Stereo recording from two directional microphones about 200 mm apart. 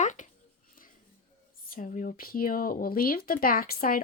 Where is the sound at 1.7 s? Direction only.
40° left (ahead or behind).